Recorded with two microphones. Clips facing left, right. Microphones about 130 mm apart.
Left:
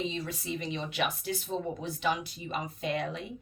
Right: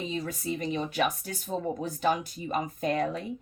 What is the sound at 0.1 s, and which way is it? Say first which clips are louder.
Speech: right 4 dB; 45° right (ahead or behind).